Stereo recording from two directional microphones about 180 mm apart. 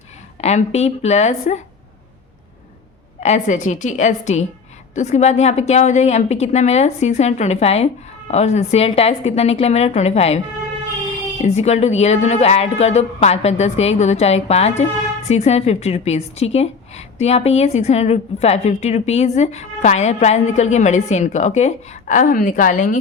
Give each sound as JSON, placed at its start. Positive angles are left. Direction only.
{"t": 0.4, "sound": "a woman's voice", "side_deg": 35}
{"t": 3.2, "sound": "a woman's voice", "side_deg": 40}
{"t": 11.4, "sound": "a woman's voice", "side_deg": 40}